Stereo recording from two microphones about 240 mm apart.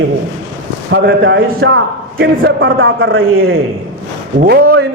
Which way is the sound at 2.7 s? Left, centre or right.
Right.